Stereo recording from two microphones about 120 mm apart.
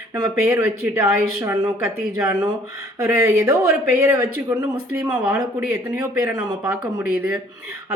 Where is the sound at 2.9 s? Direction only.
25° right (ahead or behind).